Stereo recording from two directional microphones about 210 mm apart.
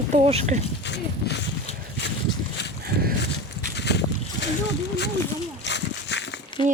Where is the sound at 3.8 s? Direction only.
55° left (ahead or behind).